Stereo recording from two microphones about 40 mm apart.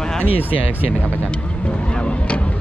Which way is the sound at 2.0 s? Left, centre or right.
Left.